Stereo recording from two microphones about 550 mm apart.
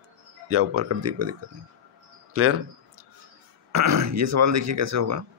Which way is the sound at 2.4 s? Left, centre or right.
Right.